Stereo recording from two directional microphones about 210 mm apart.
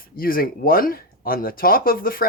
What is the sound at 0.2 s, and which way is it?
Speech, 45° left (ahead or behind).